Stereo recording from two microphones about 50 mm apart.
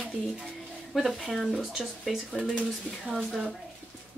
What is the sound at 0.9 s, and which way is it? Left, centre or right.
Speech, centre.